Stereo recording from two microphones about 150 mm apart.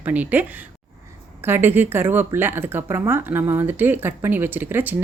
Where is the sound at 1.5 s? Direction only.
15° right (ahead or behind).